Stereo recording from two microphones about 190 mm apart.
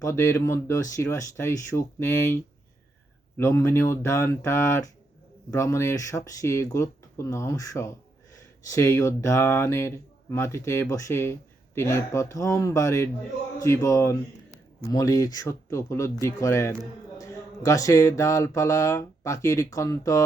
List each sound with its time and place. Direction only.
0.0 s speech: 15° left (ahead or behind)